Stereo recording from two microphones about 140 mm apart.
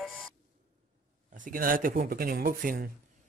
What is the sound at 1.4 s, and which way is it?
Speech, 85° right.